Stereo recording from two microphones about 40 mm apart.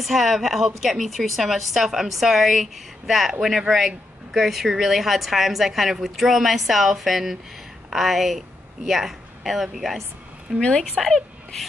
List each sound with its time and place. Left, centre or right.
0.0 s a woman's voice: centre
10.6 s speech: left
11.0 s speech: centre